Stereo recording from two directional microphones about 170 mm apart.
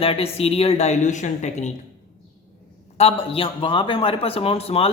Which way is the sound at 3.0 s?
35° left (ahead or behind).